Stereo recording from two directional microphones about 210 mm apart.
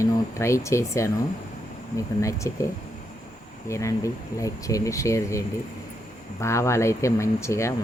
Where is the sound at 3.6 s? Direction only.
15° left (ahead or behind).